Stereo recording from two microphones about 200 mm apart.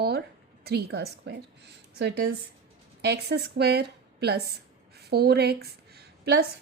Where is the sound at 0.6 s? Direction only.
55° right (ahead or behind).